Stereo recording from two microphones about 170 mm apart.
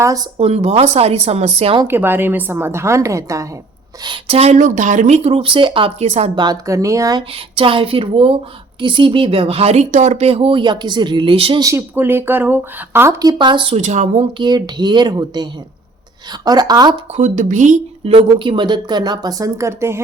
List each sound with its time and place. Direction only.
0.3 s speech: 40° right (ahead or behind)
1.8 s speech: 15° right (ahead or behind)
4.0 s speech: 35° right (ahead or behind)
6.3 s a woman's voice: 25° right (ahead or behind)
11.6 s speech: 15° right (ahead or behind); by 14.3 s 45° right (ahead or behind)
14.3 s a woman's voice: 25° right (ahead or behind)
17.2 s speech: 45° right (ahead or behind)
18.0 s a woman's voice: 30° right (ahead or behind); by 20.0 s 15° right (ahead or behind)